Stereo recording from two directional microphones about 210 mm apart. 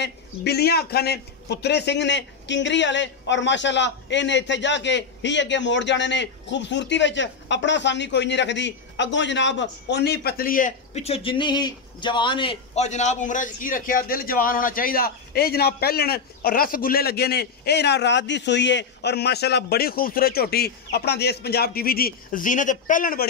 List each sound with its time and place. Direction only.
0.0 s a man's voice: 50° left (ahead or behind)